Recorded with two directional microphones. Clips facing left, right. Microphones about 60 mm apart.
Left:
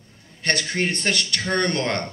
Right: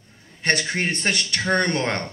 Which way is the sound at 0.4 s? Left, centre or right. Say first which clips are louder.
Right 1 dB; right.